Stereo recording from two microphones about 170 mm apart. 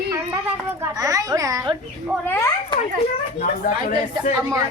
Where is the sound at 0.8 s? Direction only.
20° right (ahead or behind).